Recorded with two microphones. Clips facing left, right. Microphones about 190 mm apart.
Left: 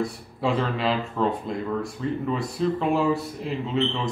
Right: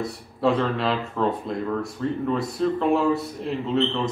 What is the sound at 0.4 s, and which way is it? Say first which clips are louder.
Speech: right 3 dB; centre (ahead or behind).